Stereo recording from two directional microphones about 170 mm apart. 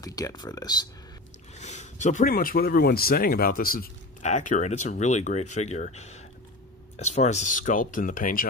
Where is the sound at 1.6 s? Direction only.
45° left (ahead or behind); by 3.9 s 60° left (ahead or behind).